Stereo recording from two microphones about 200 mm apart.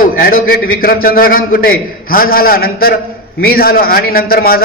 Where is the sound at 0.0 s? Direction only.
45° left (ahead or behind).